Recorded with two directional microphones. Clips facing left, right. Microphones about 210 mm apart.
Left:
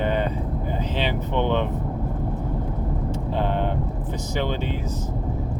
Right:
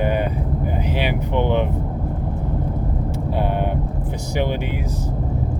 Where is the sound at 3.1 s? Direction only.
10° right (ahead or behind).